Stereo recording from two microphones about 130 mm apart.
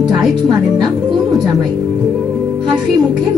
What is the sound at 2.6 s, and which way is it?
Speech, 35° right (ahead or behind).